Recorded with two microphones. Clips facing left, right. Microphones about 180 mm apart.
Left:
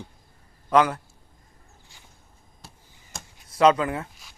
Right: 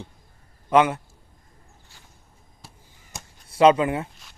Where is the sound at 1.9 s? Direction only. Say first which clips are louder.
Right 1 dB; 15° left (ahead or behind).